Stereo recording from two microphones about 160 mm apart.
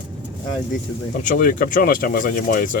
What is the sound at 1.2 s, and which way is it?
Speech, 60° left (ahead or behind).